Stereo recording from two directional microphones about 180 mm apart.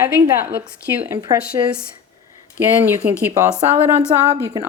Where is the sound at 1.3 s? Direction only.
20° right (ahead or behind).